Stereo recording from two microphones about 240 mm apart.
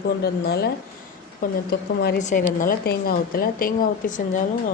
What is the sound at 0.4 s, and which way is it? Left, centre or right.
A woman's voice, left.